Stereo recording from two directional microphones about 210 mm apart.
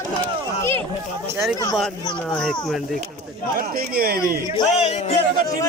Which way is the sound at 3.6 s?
45° right (ahead or behind).